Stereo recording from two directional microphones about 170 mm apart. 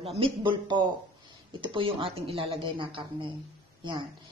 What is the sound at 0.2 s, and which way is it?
A woman's voice, 30° right (ahead or behind).